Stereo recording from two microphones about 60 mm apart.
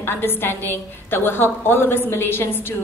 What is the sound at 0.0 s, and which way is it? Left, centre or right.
A woman's voice, left.